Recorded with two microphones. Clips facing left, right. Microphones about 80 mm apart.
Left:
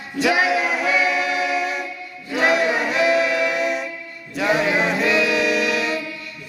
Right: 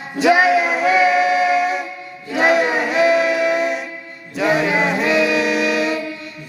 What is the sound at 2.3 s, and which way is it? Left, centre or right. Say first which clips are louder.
Music: right 3 dB; right.